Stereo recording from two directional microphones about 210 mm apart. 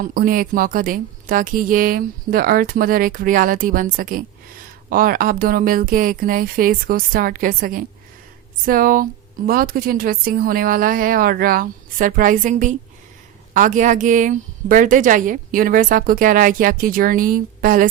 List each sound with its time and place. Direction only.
0.0 s a woman's voice: 45° right (ahead or behind)